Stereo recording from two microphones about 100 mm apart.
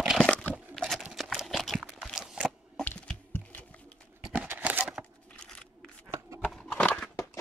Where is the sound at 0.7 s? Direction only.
5° left (ahead or behind).